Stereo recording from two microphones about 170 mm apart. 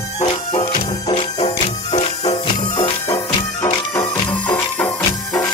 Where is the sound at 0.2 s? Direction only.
45° left (ahead or behind).